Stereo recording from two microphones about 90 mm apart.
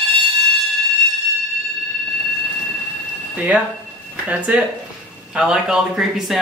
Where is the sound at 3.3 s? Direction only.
15° right (ahead or behind).